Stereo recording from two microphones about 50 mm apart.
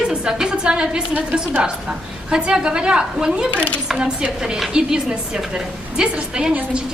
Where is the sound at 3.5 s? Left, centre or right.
Left.